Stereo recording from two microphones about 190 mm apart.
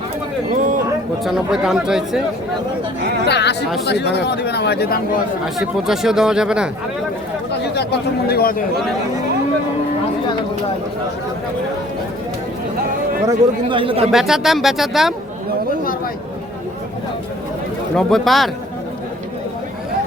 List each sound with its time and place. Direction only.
1.2 s speech: centre (ahead or behind)
3.2 s speech: 60° left (ahead or behind)
5.5 s speech: centre (ahead or behind)
7.6 s speech: 60° left (ahead or behind)
13.2 s speech: 25° right (ahead or behind)
14.1 s speech: centre (ahead or behind)
17.9 s speech: centre (ahead or behind)